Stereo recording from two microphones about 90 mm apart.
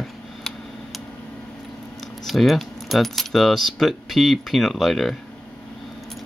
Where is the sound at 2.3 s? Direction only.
Centre (ahead or behind).